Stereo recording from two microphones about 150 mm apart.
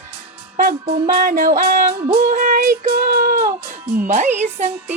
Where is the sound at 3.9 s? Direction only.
60° right (ahead or behind).